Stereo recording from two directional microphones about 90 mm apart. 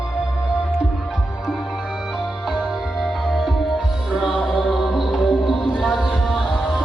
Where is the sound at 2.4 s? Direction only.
5° right (ahead or behind).